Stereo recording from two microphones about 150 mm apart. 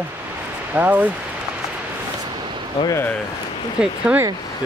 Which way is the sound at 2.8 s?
25° left (ahead or behind).